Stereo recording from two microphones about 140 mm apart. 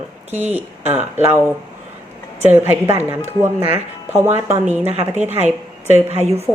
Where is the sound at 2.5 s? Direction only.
15° right (ahead or behind).